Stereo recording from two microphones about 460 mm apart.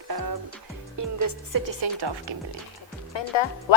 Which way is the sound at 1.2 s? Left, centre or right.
Right.